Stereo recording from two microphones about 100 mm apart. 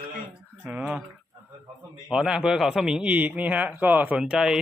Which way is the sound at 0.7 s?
10° right (ahead or behind).